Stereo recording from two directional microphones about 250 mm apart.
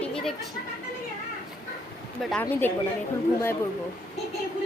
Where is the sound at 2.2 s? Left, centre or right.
Centre.